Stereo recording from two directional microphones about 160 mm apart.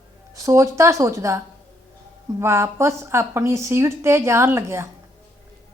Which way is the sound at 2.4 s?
15° right (ahead or behind).